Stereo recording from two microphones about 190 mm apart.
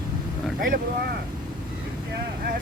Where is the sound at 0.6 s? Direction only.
50° right (ahead or behind).